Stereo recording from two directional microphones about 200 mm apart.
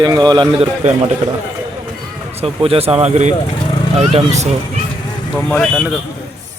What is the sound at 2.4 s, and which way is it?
Speech, 30° right (ahead or behind).